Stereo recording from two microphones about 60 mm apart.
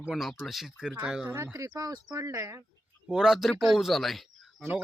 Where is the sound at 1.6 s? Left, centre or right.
Right.